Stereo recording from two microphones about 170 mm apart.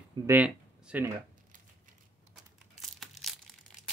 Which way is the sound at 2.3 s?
Centre (ahead or behind).